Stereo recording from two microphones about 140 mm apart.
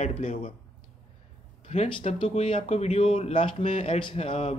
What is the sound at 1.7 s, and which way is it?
Speech, 45° left (ahead or behind).